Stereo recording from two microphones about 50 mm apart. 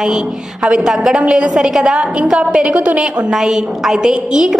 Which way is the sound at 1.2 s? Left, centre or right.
Right.